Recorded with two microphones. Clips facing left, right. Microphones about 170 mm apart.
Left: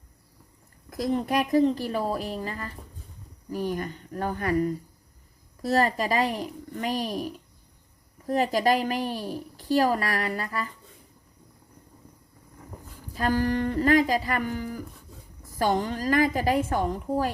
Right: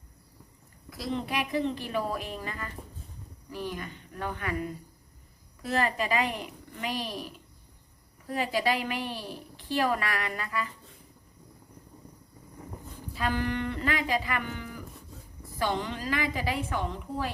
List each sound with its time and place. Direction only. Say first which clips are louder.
0.9 s a woman's voice: left 6 dB; 45° left (ahead or behind)
13.1 s a woman's voice: left 5 dB; 40° left (ahead or behind)